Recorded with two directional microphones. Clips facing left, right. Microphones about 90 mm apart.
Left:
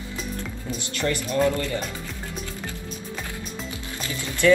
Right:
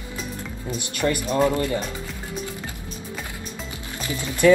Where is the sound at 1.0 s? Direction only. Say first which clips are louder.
Right 2 dB; 15° right (ahead or behind).